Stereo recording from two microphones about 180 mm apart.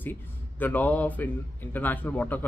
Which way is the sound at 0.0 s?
10° left (ahead or behind).